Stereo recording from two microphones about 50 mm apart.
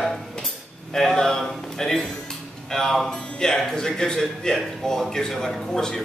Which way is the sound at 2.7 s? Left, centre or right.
Centre.